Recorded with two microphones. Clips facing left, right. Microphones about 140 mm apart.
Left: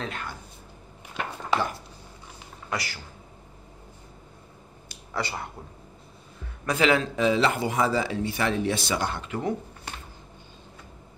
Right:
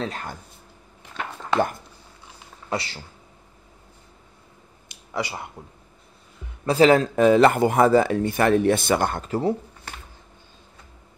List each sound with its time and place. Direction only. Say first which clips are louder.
0.0 s speech: right 4 dB; 40° right (ahead or behind)
2.7 s speech: right 4 dB; 25° right (ahead or behind)
4.8 s a sound: right 3 dB; 15° right (ahead or behind)
6.6 s a man's voice: right 7 dB; 35° right (ahead or behind)